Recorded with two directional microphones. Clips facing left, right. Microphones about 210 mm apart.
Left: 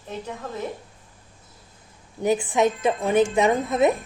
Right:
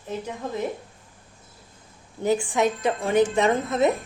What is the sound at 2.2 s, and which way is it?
A woman's voice, 20° left (ahead or behind).